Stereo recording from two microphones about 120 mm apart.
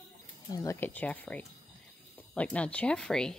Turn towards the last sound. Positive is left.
turn(degrees=5)  # may be behind; listen again after turning